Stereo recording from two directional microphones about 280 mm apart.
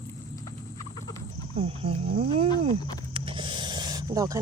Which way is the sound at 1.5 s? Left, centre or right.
Right.